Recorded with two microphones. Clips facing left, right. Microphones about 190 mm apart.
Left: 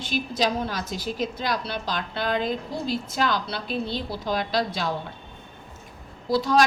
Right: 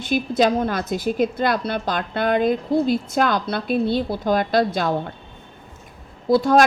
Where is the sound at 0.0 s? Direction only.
55° right (ahead or behind).